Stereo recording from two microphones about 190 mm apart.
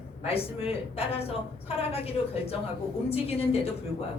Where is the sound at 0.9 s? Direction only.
30° left (ahead or behind).